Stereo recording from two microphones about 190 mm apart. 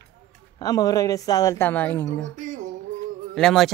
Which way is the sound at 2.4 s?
40° right (ahead or behind).